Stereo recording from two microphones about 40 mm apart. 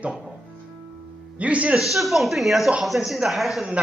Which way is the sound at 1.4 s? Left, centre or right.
Right.